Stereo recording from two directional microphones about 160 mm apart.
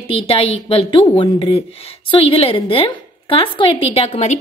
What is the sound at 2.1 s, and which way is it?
A woman's voice, 35° left (ahead or behind).